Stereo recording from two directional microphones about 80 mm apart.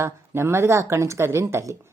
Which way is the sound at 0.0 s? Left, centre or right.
Right.